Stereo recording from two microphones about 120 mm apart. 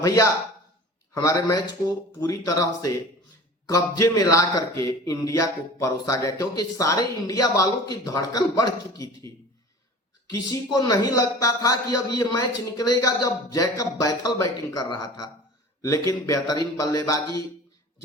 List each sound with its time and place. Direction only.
0.0 s a man's voice: 30° left (ahead or behind)
10.3 s a man's voice: 35° left (ahead or behind)